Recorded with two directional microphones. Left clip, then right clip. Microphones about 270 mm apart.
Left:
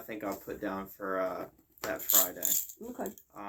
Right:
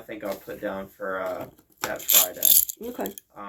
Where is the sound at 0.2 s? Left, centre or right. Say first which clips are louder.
Right 6 dB; left.